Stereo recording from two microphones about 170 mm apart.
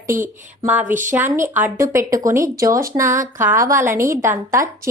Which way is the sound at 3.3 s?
15° right (ahead or behind).